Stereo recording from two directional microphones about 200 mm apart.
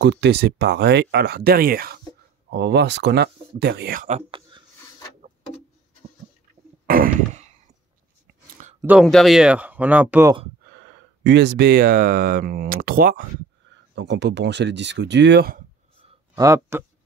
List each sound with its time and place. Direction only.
0.0 s speech: 60° right (ahead or behind); by 4.2 s 40° right (ahead or behind)
4.3 s a sound: 25° right (ahead or behind)
6.9 s a sound: 45° right (ahead or behind)
8.8 s speech: 5° right (ahead or behind)
10.7 s speech: 60° right (ahead or behind)
13.9 s speech: 60° right (ahead or behind)
16.3 s speech: 15° right (ahead or behind)